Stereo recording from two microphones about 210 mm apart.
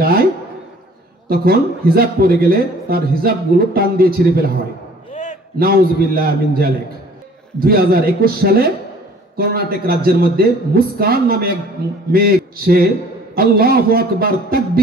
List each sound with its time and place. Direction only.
0.0 s speech: 45° right (ahead or behind)
1.3 s speech: 45° right (ahead or behind)
5.1 s a sound: 35° left (ahead or behind)
5.6 s speech: 45° right (ahead or behind)